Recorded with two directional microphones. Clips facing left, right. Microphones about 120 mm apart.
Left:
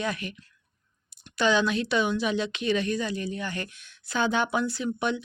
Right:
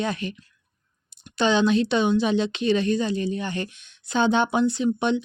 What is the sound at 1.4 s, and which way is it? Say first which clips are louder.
Speech: right 4 dB; 25° right (ahead or behind).